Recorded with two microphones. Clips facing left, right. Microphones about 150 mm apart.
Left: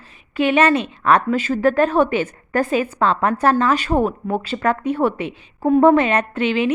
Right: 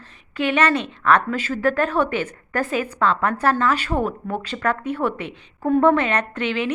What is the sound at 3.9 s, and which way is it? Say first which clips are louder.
Speech: left 8 dB; 30° left (ahead or behind).